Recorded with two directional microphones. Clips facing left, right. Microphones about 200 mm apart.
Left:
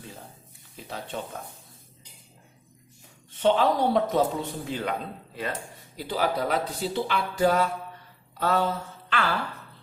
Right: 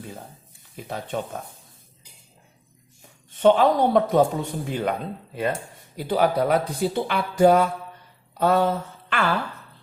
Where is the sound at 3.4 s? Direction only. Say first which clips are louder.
Right 5 dB; 50° right (ahead or behind).